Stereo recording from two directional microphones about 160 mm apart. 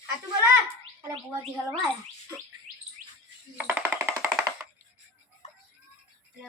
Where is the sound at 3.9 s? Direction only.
15° right (ahead or behind).